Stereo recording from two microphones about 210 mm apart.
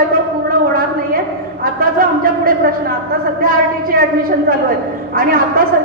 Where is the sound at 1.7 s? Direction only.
45° right (ahead or behind).